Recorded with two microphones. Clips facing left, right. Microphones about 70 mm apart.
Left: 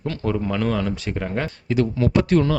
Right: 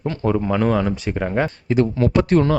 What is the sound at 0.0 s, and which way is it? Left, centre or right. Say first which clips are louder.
Speech: right 3 dB; right.